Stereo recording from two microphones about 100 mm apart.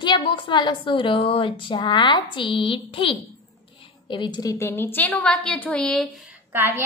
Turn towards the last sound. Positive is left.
turn(degrees=-25)  # may be behind; listen again after turning